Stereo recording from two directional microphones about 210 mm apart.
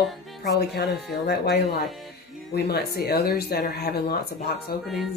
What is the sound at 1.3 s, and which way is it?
Speech, 50° left (ahead or behind).